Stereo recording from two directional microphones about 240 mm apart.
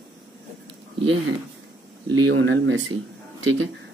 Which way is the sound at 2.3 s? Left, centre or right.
Right.